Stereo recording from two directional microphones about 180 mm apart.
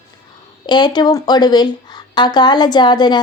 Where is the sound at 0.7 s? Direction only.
25° left (ahead or behind).